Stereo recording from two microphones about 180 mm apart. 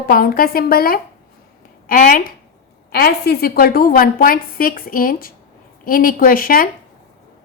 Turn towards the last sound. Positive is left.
turn(degrees=50)  # may be behind; listen again after turning